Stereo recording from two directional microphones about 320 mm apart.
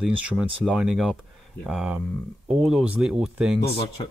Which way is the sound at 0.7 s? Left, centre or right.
Centre.